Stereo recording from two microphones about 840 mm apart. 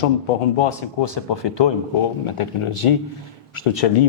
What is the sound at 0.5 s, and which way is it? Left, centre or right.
Speech, left.